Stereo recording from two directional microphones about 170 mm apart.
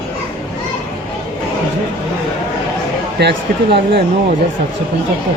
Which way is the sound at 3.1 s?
75° right (ahead or behind).